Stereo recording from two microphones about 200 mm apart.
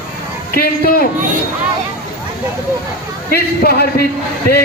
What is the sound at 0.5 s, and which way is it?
Speech, 50° left (ahead or behind).